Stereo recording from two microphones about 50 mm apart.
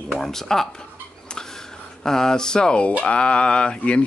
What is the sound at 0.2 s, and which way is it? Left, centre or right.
Speech, centre.